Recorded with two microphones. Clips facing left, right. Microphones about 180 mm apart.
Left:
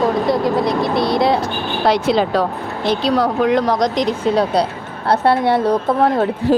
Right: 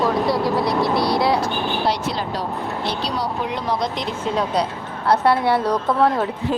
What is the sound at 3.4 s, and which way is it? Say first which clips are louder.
Speech: left 8 dB; 90° left.